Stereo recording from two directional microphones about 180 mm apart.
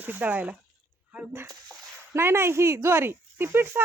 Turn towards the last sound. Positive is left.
turn(degrees=-10)  # may be behind; listen again after turning